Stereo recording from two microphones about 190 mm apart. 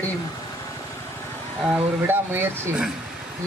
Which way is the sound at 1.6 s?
10° right (ahead or behind).